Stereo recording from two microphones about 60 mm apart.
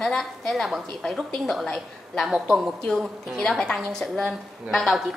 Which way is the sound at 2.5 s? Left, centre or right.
Centre.